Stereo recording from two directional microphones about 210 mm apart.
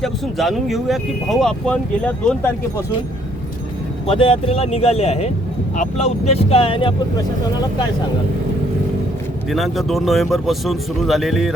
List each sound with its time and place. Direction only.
0.0 s speech: centre (ahead or behind)
4.0 s speech: 25° left (ahead or behind)
9.5 s speech: centre (ahead or behind)